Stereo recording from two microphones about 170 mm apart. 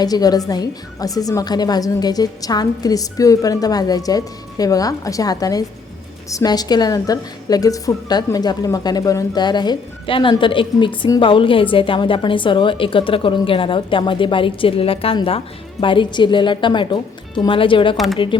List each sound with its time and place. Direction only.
0.0 s a woman's voice: 20° left (ahead or behind)
17.9 s speech: centre (ahead or behind)